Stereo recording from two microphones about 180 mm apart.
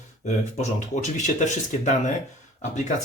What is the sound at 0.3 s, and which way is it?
Speech, 40° left (ahead or behind).